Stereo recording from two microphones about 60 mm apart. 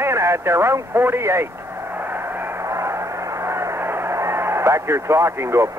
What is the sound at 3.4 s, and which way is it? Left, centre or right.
Speech, right.